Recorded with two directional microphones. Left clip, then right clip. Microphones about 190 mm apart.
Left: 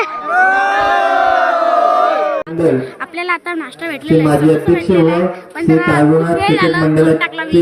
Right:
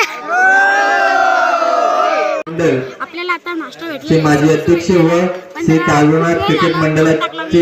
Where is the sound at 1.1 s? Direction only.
10° left (ahead or behind).